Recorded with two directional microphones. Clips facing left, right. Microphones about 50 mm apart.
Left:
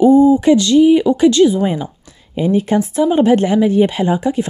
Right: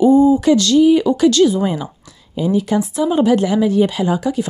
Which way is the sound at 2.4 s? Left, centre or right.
Left.